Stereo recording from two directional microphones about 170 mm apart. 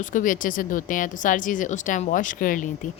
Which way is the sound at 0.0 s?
50° left (ahead or behind).